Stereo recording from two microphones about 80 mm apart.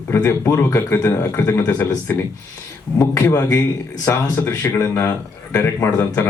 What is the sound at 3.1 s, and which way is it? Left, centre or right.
Speech, left.